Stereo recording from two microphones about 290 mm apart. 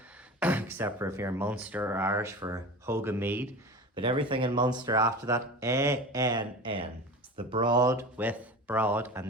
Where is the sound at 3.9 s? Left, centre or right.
Centre.